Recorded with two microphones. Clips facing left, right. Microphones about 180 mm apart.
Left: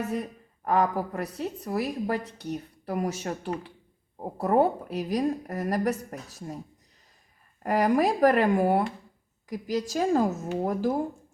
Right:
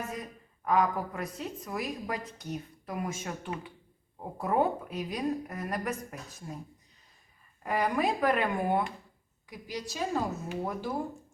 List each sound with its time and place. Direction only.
0.6 s a woman's voice: 35° left (ahead or behind)
7.6 s a woman's voice: 40° left (ahead or behind)